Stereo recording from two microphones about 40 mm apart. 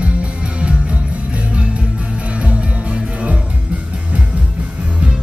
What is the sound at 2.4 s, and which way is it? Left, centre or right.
Music, right.